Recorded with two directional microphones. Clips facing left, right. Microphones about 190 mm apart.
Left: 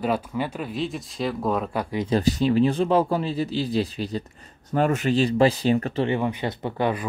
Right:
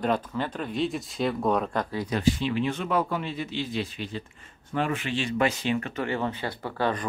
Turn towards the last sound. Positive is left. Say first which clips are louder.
# left 3 dB
turn(degrees=15)  # may be behind; listen again after turning